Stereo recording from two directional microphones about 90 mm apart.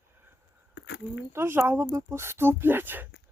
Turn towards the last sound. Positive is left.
turn(degrees=-25)  # may be behind; listen again after turning